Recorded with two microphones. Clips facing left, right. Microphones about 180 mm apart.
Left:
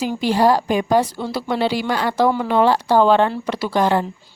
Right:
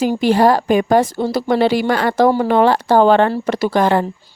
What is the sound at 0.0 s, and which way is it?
Speech, 50° right (ahead or behind).